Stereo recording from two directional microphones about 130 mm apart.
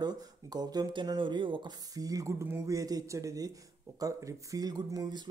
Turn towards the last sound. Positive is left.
turn(degrees=-30)  # may be behind; listen again after turning